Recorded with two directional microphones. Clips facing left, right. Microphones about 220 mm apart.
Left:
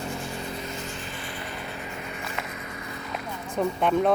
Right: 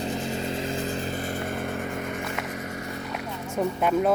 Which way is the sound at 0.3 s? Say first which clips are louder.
Right 5 dB; 25° right (ahead or behind).